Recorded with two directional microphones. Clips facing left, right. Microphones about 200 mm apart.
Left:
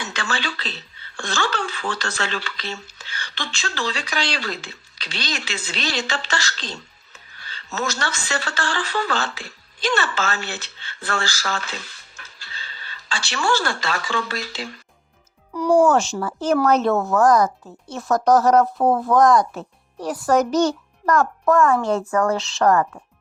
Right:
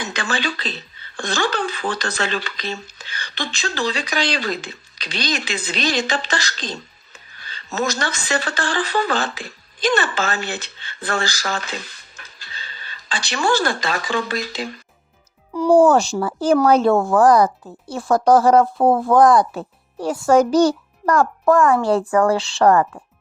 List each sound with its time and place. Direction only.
0.0 s a woman's voice: 15° right (ahead or behind)
15.5 s speech: 30° right (ahead or behind)